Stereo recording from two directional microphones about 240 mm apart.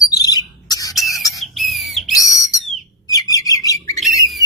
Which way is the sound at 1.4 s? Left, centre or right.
Centre.